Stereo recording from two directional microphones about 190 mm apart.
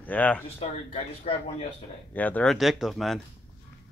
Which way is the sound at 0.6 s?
35° left (ahead or behind).